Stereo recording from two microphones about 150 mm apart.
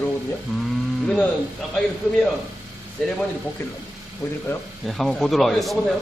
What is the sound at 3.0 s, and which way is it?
Speech, 5° left (ahead or behind).